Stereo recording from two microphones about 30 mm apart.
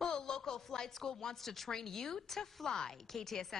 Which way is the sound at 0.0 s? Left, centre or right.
Left.